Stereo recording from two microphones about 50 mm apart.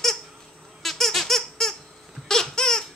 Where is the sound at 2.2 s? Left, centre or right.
Centre.